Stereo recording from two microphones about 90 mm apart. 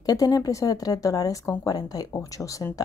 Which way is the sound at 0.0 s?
45° left (ahead or behind).